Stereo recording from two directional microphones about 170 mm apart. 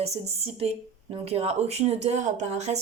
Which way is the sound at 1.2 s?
35° right (ahead or behind).